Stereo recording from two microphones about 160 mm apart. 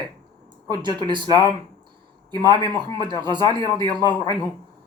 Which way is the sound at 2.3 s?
25° right (ahead or behind).